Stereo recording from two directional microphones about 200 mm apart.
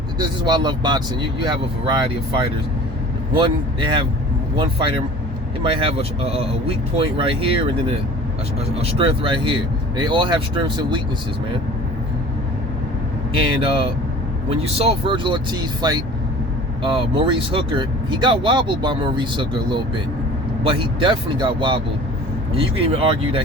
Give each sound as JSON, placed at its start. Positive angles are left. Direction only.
{"t": 0.2, "sound": "speech", "side_deg": -20}
{"t": 13.3, "sound": "speech", "side_deg": -25}